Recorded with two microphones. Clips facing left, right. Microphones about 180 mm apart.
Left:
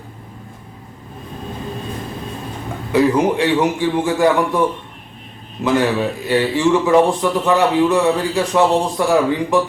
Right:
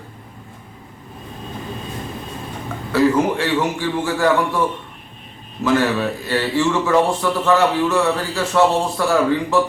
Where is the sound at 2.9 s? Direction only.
15° left (ahead or behind).